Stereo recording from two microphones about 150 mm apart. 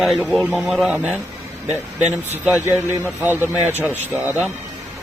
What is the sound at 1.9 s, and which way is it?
Speech, 45° right (ahead or behind).